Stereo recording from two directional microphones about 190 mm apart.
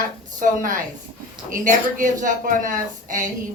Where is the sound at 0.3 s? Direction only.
45° right (ahead or behind).